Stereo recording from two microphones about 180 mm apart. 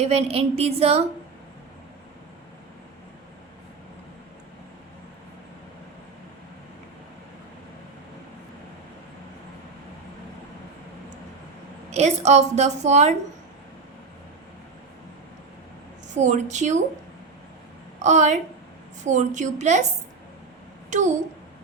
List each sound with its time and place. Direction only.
0.0 s a woman's voice: 35° right (ahead or behind)
11.9 s a woman's voice: 40° right (ahead or behind)
16.1 s a woman's voice: 40° right (ahead or behind)
18.0 s a woman's voice: 40° right (ahead or behind)